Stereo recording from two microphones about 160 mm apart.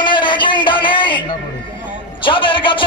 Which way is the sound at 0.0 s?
30° left (ahead or behind).